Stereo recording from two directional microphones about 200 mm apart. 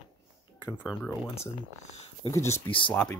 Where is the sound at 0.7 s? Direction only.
10° left (ahead or behind).